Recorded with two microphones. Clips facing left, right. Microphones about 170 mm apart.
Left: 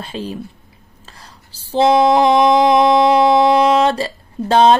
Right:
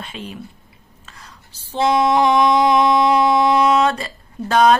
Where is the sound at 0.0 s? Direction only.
35° left (ahead or behind).